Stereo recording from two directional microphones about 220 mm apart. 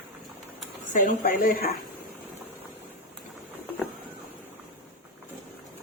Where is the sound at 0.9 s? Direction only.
40° left (ahead or behind).